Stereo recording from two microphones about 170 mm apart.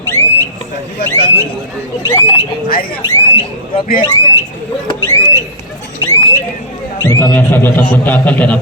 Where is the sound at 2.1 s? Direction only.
25° left (ahead or behind).